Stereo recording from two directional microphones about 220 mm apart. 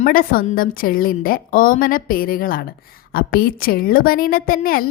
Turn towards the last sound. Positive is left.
turn(degrees=40)  # may be behind; listen again after turning